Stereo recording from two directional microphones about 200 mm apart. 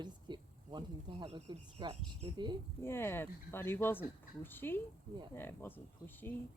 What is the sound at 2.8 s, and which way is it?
Speech, 10° left (ahead or behind).